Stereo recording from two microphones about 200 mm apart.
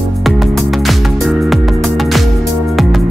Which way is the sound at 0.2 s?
Centre (ahead or behind).